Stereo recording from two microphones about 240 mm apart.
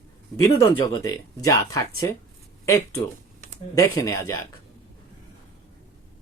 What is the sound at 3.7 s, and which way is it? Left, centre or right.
Speech, centre.